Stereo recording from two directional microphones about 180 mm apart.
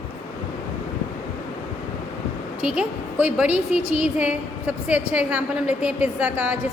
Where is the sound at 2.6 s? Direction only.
5° right (ahead or behind).